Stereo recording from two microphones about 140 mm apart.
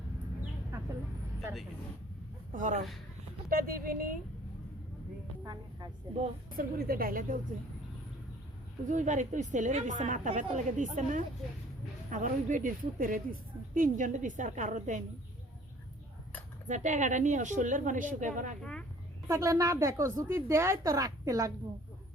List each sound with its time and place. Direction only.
2.5 s speech: 65° right (ahead or behind)
3.5 s a woman's voice: 90° right
6.6 s a woman's voice: 90° right
8.9 s speech: 60° right (ahead or behind)
16.6 s speech: 60° right (ahead or behind)
18.6 s speech: 5° left (ahead or behind)
19.3 s a woman's voice: 25° right (ahead or behind)